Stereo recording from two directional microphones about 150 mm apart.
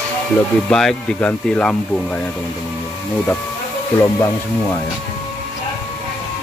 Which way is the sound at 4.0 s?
20° left (ahead or behind).